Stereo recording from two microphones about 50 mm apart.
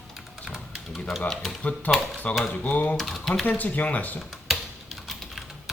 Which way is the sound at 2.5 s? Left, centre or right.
Left.